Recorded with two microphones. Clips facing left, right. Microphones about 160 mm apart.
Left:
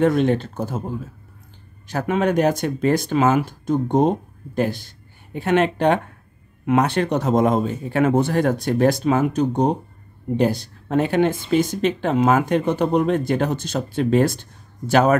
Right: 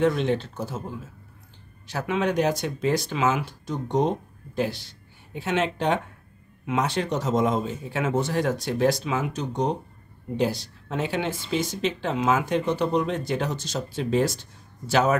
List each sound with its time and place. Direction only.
0.0 s speech: 50° left (ahead or behind)